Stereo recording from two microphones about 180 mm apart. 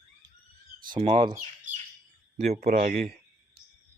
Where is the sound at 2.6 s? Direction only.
50° right (ahead or behind).